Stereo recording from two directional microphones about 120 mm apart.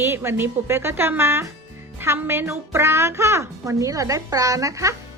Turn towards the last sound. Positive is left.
turn(degrees=-25)  # may be behind; listen again after turning